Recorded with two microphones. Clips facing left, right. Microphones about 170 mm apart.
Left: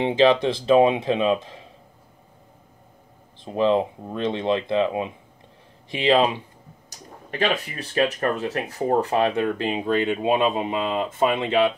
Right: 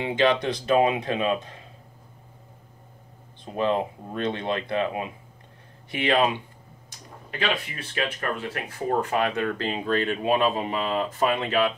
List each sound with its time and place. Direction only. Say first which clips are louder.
0.0 s speech: left 5 dB; 25° left (ahead or behind)
3.4 s speech: left 4 dB; 25° left (ahead or behind)
6.9 s speech: left 5 dB; 40° left (ahead or behind)
8.8 s speech: left 4 dB; 25° left (ahead or behind)